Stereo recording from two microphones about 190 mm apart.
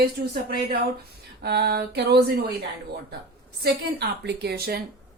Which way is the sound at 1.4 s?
60° right (ahead or behind).